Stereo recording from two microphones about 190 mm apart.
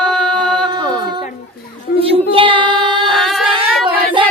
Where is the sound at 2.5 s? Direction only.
25° right (ahead or behind).